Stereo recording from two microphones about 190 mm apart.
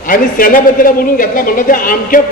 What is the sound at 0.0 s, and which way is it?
A man's voice, 45° left (ahead or behind).